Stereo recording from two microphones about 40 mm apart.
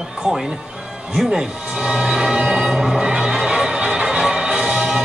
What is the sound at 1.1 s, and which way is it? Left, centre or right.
Music, centre.